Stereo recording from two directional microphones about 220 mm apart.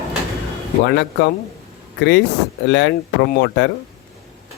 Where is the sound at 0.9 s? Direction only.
50° left (ahead or behind).